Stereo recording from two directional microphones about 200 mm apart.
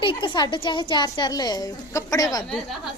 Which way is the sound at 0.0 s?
25° left (ahead or behind).